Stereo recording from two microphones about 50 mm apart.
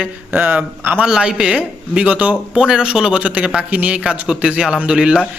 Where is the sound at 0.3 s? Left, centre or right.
Right.